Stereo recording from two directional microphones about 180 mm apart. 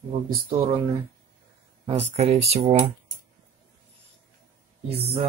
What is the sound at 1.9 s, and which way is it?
Speech, 35° right (ahead or behind).